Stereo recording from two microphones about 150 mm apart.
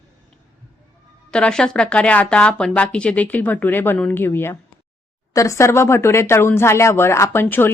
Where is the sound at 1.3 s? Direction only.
5° left (ahead or behind).